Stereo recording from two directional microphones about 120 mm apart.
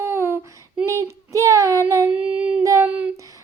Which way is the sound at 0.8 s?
25° right (ahead or behind).